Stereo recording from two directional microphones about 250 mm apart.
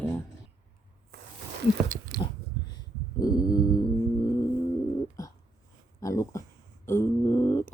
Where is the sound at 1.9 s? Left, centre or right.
Right.